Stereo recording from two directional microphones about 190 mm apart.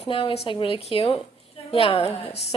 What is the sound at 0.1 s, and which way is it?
A woman's voice, 30° left (ahead or behind).